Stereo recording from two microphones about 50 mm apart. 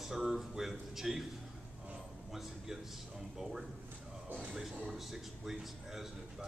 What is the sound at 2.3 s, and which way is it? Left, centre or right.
A man's voice, centre.